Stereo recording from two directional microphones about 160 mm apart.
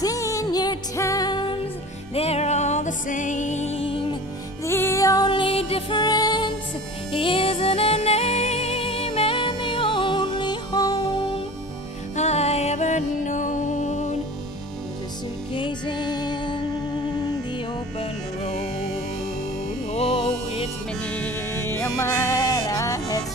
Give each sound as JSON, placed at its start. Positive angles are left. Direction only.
{"t": 0.0, "sound": "music", "side_deg": 20}
{"t": 2.1, "sound": "music", "side_deg": 40}
{"t": 4.6, "sound": "music", "side_deg": 15}
{"t": 12.2, "sound": "music", "side_deg": 40}
{"t": 15.5, "sound": "music", "side_deg": 30}
{"t": 19.9, "sound": "music", "side_deg": 35}
{"t": 21.0, "sound": "music", "side_deg": 10}